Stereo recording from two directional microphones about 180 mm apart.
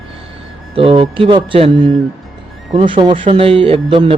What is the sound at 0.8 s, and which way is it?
Speech, 30° right (ahead or behind).